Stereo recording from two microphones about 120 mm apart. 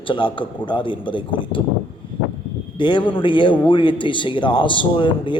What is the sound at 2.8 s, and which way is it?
Speech, 40° left (ahead or behind).